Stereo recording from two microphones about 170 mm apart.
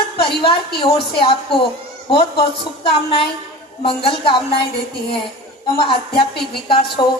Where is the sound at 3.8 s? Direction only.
30° left (ahead or behind).